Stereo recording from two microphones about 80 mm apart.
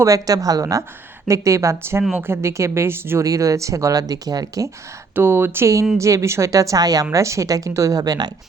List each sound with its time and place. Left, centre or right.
0.0 s a woman's voice: right
3.2 s a woman's voice: right
5.1 s a woman's voice: right